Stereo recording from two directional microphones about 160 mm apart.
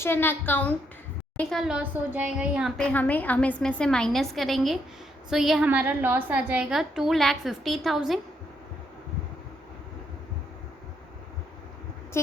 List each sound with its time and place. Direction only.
0.0 s a woman's voice: 15° left (ahead or behind)
1.4 s a woman's voice: centre (ahead or behind)
12.1 s a woman's voice: 15° left (ahead or behind)